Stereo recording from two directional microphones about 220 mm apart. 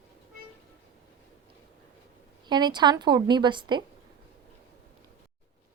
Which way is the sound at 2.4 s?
20° right (ahead or behind).